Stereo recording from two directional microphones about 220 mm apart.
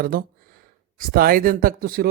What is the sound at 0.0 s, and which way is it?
Speech, 40° right (ahead or behind).